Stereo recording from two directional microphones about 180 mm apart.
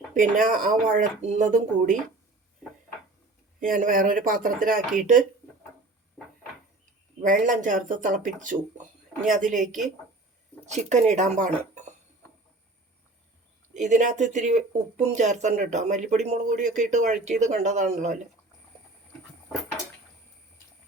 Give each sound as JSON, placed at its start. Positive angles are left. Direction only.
{"t": 0.1, "sound": "speech", "side_deg": -45}
{"t": 3.6, "sound": "speech", "side_deg": -50}
{"t": 7.2, "sound": "speech", "side_deg": -45}
{"t": 10.7, "sound": "speech", "side_deg": -40}
{"t": 13.7, "sound": "speech", "side_deg": -45}